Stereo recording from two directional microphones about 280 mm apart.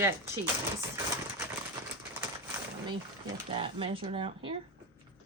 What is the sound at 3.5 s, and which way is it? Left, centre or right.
Speech, centre.